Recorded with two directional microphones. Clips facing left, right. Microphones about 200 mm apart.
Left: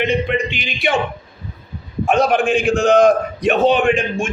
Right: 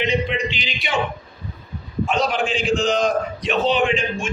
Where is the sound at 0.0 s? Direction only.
55° left (ahead or behind).